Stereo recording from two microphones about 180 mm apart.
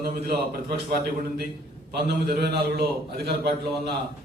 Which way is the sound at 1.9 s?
60° right (ahead or behind).